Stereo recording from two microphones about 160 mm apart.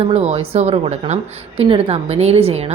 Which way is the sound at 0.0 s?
40° right (ahead or behind).